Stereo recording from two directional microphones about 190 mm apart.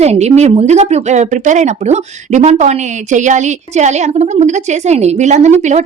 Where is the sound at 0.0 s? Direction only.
35° right (ahead or behind).